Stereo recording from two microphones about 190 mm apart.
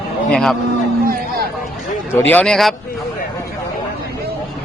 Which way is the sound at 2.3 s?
5° left (ahead or behind).